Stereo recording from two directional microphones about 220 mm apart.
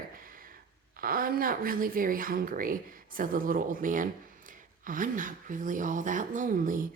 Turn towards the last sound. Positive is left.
turn(degrees=-40)  # may be behind; listen again after turning